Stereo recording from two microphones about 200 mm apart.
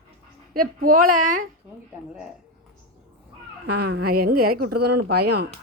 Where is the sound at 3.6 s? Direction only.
55° right (ahead or behind).